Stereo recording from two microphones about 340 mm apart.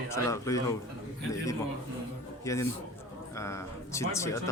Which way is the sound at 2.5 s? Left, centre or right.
Centre.